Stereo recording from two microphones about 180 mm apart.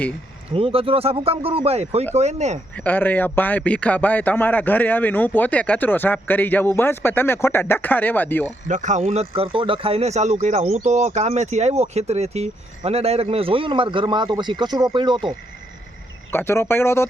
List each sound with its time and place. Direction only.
0.5 s speech: 30° right (ahead or behind)
2.7 s a man's voice: 10° left (ahead or behind)
8.6 s speech: 45° right (ahead or behind); by 15.3 s 25° right (ahead or behind)
16.3 s a man's voice: 15° left (ahead or behind)